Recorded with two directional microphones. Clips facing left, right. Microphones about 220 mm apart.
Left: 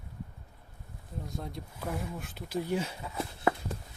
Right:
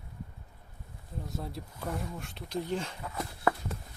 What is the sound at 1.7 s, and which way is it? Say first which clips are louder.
Speech: left 1 dB; 5° left (ahead or behind).